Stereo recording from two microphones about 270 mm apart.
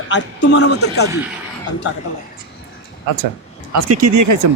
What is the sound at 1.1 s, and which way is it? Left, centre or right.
Speech, centre.